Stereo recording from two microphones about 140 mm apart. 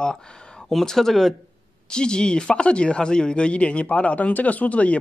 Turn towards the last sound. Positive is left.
turn(degrees=10)  # may be behind; listen again after turning